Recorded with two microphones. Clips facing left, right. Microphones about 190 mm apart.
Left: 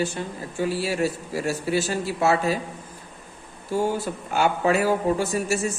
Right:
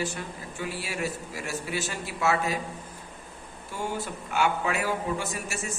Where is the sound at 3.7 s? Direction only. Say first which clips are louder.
Left 8 dB; 35° left (ahead or behind).